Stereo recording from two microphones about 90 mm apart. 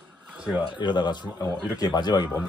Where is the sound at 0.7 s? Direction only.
55° left (ahead or behind).